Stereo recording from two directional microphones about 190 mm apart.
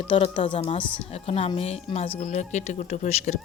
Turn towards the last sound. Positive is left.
turn(degrees=35)  # may be behind; listen again after turning